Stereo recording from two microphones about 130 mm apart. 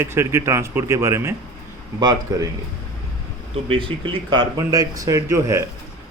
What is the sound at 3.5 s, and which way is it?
Speech, 45° right (ahead or behind).